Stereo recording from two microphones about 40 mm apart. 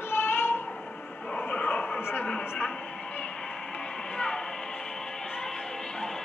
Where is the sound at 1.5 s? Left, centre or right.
Left.